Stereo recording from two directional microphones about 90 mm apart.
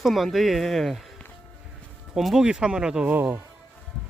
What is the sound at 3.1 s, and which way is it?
Speech, 20° right (ahead or behind).